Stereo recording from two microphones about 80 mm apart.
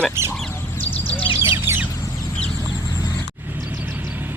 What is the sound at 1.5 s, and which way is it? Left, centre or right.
Bird, right.